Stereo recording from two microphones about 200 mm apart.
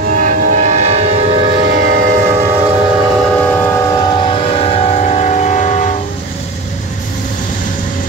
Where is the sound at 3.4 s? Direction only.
10° left (ahead or behind).